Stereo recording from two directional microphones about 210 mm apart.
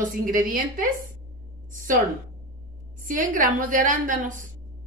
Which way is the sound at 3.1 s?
40° right (ahead or behind).